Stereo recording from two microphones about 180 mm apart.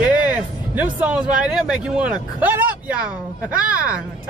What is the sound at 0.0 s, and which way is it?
Speech, 10° right (ahead or behind).